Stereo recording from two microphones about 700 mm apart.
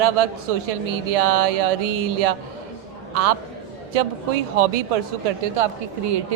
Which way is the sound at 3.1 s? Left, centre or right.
Right.